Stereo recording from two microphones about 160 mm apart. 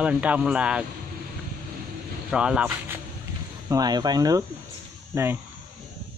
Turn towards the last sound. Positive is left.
turn(degrees=-15)  # may be behind; listen again after turning